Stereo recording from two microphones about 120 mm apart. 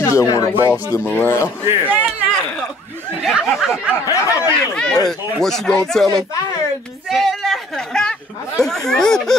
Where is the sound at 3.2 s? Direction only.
Centre (ahead or behind).